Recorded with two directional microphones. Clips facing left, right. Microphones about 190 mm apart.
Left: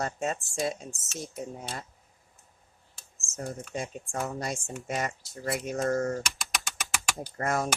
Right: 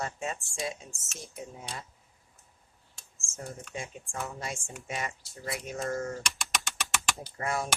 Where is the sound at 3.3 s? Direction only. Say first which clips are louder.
Left 5 dB; 40° left (ahead or behind).